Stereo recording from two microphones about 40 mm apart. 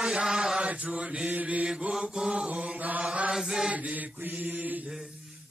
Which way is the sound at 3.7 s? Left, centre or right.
Right.